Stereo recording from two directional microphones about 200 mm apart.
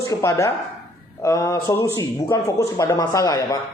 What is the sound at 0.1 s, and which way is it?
Speech, 15° left (ahead or behind).